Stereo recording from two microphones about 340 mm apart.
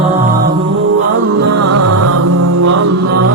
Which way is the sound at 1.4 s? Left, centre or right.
Right.